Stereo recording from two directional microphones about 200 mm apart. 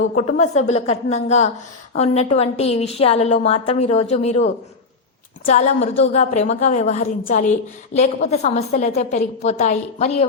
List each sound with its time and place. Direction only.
0.2 s a woman's voice: 35° left (ahead or behind)